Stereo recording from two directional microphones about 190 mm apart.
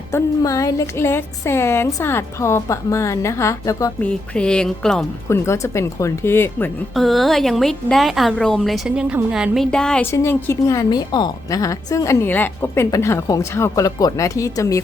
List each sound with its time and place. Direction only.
0.1 s a woman's voice: 15° left (ahead or behind)
4.1 s a woman's voice: 5° left (ahead or behind)
5.3 s a woman's voice: 15° left (ahead or behind)
6.9 s a woman's voice: centre (ahead or behind); by 14.8 s 15° left (ahead or behind)